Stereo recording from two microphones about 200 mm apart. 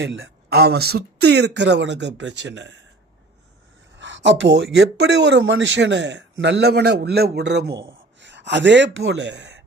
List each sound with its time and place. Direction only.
0.0 s speech: 60° right (ahead or behind)
3.9 s speech: 65° right (ahead or behind)